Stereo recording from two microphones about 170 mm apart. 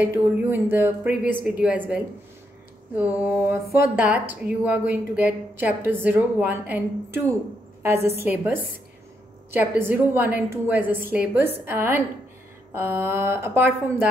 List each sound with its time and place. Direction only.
0.0 s a woman's voice: 10° right (ahead or behind)
3.0 s a woman's voice: 10° right (ahead or behind)